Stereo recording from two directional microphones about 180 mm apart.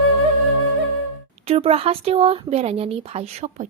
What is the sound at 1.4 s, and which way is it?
Speech, 35° right (ahead or behind).